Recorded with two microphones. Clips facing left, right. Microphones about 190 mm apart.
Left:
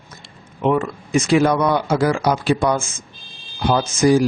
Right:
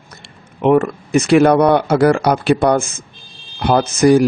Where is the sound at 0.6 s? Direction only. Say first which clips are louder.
Right 6 dB; 65° right (ahead or behind).